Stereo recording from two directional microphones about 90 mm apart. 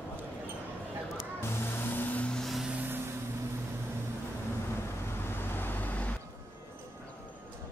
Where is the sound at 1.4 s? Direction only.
20° left (ahead or behind); by 2.6 s 5° left (ahead or behind).